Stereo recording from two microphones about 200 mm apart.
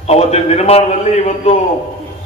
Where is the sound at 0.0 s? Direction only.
30° left (ahead or behind).